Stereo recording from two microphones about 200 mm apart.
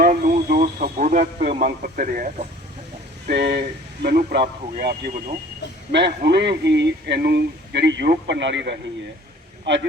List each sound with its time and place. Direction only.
0.0 s radio: 45° right (ahead or behind)
3.2 s speech: 55° right (ahead or behind)